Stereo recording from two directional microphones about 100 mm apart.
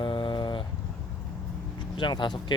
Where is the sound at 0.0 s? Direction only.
55° left (ahead or behind).